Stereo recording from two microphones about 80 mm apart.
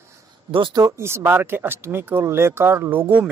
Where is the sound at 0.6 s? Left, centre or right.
Right.